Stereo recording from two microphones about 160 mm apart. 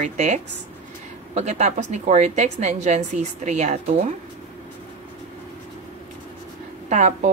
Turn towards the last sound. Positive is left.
turn(degrees=-45)  # may be behind; listen again after turning